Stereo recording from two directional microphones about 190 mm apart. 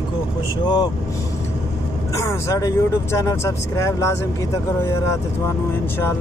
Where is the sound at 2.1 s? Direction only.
15° left (ahead or behind).